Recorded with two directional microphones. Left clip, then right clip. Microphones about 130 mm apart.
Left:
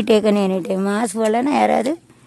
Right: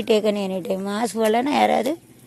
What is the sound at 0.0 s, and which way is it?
A woman's voice, 40° left (ahead or behind).